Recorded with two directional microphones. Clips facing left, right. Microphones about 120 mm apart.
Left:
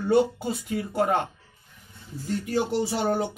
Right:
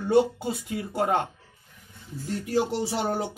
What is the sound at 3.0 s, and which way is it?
Speech, 15° right (ahead or behind).